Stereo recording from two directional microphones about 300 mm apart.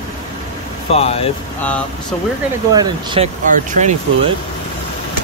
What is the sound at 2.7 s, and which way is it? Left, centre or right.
Speech, centre.